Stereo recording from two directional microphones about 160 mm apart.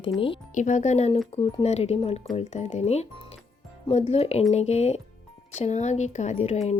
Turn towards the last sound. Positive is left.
turn(degrees=45)  # may be behind; listen again after turning